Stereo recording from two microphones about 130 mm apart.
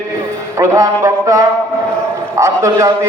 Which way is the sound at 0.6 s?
20° right (ahead or behind).